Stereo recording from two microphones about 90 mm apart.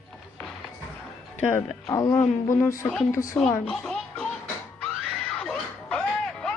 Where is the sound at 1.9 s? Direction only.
40° left (ahead or behind).